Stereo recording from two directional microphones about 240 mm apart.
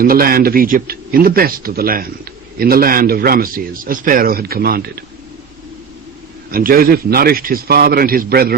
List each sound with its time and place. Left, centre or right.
0.0 s a man's voice: right
6.5 s a man's voice: right